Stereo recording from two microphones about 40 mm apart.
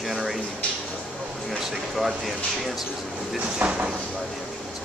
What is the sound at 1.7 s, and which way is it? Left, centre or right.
Speech, centre.